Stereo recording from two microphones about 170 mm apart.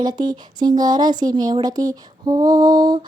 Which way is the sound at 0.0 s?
25° right (ahead or behind).